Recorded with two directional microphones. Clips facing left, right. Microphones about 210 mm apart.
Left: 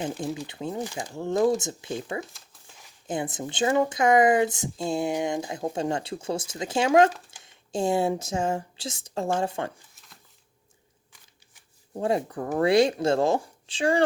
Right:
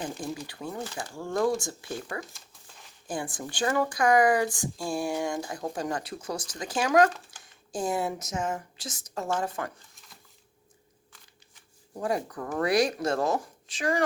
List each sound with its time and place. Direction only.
0.4 s speech: 20° left (ahead or behind)
2.3 s crumpling: 5° left (ahead or behind)
3.1 s speech: 20° left (ahead or behind)
11.9 s speech: 25° left (ahead or behind)